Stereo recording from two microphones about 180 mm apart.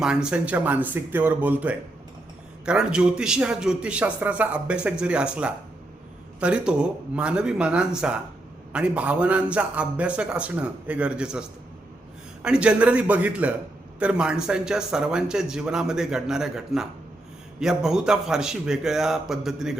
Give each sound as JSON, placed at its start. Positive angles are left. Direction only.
{"t": 0.0, "sound": "a man's voice", "side_deg": -5}